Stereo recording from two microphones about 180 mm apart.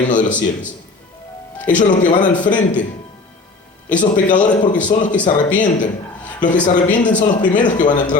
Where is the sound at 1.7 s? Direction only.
45° left (ahead or behind).